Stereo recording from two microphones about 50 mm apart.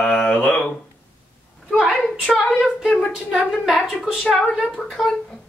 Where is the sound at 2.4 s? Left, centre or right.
Centre.